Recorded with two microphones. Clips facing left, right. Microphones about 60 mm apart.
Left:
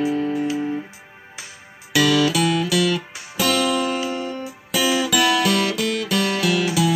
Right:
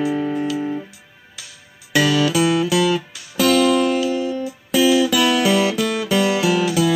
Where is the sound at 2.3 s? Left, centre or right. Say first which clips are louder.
Right 3 dB; centre.